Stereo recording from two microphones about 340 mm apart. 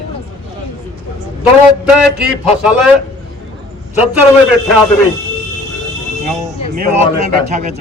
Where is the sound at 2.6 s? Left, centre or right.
Centre.